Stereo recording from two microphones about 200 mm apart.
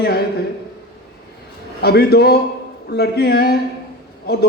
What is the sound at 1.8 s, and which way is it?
A man's voice, 50° left (ahead or behind).